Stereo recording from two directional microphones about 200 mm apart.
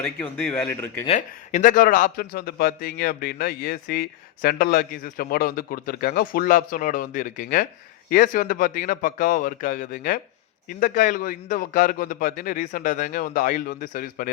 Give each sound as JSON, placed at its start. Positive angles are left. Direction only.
{"t": 0.0, "sound": "speech", "side_deg": 10}
{"t": 1.0, "sound": "a man's voice", "side_deg": 35}